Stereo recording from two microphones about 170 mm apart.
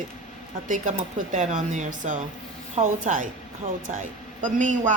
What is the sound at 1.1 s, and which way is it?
A woman's voice, 45° right (ahead or behind).